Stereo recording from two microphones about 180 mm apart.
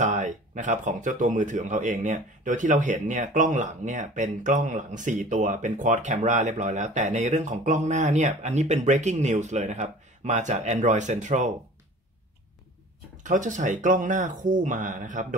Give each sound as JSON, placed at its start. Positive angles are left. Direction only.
{"t": 0.0, "sound": "speech", "side_deg": -45}
{"t": 13.2, "sound": "speech", "side_deg": -45}